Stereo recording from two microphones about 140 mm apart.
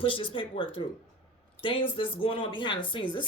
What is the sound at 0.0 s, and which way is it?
Speech, 35° left (ahead or behind).